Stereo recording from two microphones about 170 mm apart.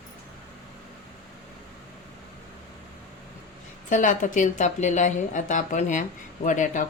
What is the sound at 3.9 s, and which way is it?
A woman's voice, 50° left (ahead or behind).